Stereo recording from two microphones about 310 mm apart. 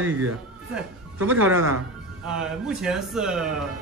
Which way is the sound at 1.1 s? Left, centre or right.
Right.